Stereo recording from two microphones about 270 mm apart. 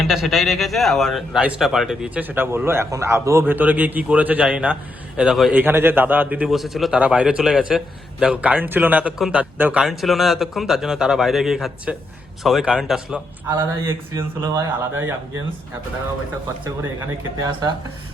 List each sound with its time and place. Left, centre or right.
0.0 s a man's voice: centre
17.4 s speech: centre